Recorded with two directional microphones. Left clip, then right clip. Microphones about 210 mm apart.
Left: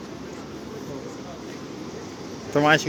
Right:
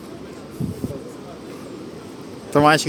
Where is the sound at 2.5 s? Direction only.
25° right (ahead or behind).